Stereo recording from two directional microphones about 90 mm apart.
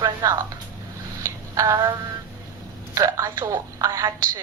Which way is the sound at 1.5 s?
40° right (ahead or behind).